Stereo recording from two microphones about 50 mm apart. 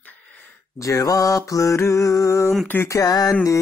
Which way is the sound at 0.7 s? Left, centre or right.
Left.